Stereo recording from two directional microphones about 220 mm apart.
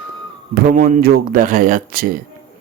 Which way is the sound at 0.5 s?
40° right (ahead or behind).